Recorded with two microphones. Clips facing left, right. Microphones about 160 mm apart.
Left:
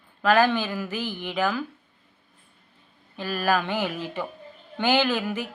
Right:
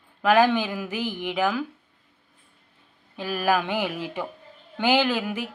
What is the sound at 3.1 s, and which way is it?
Speech, 10° right (ahead or behind).